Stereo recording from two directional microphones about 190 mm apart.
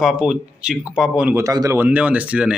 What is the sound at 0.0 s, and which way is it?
Speech, centre (ahead or behind).